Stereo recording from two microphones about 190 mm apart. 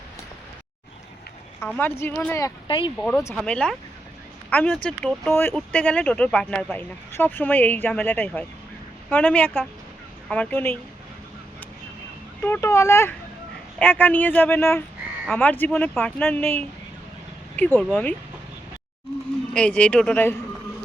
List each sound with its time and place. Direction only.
1.6 s speech: 10° left (ahead or behind)
2.6 s speech: 25° left (ahead or behind)
3.0 s speech: 10° left (ahead or behind)
12.4 s speech: 15° left (ahead or behind)
19.5 s speech: 5° left (ahead or behind)